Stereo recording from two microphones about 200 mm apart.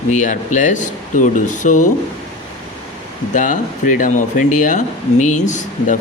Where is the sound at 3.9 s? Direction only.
40° left (ahead or behind).